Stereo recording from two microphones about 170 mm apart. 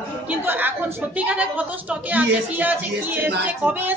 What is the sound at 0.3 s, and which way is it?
A woman's voice, 10° right (ahead or behind).